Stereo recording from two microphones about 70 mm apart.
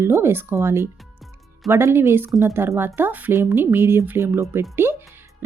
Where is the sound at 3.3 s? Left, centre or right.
Right.